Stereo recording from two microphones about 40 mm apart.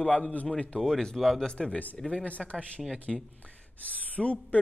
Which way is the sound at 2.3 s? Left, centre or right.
Left.